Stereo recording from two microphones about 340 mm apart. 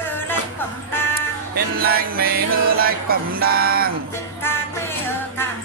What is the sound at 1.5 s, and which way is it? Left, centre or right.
Music, right.